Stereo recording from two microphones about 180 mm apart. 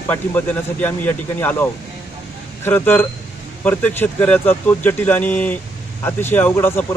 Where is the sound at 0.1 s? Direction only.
10° left (ahead or behind).